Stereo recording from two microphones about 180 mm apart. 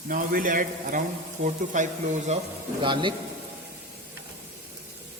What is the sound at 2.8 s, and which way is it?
Speech, 25° right (ahead or behind).